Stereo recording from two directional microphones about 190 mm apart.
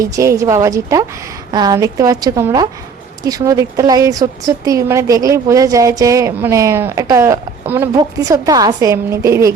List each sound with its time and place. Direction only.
0.0 s a woman's voice: 15° right (ahead or behind)